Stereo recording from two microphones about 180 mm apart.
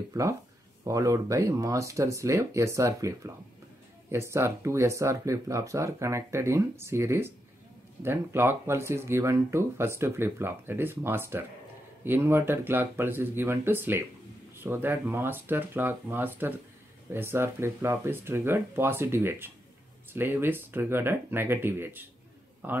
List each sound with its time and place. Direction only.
0.1 s speech: 15° right (ahead or behind)